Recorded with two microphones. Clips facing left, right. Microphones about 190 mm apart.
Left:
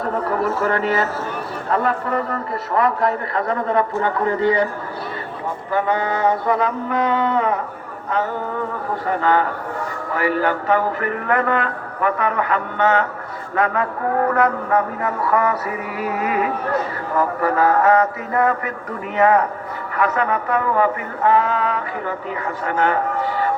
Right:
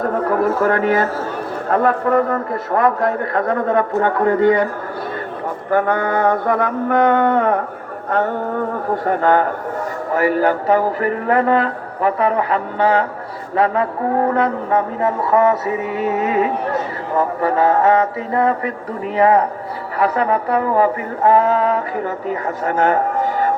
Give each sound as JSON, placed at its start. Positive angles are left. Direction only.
{"t": 0.0, "sound": "a man's voice", "side_deg": -50}
{"t": 5.7, "sound": "a man's voice", "side_deg": -50}
{"t": 10.2, "sound": "music", "side_deg": -40}
{"t": 14.3, "sound": "a sound", "side_deg": -25}
{"t": 19.1, "sound": "music", "side_deg": -30}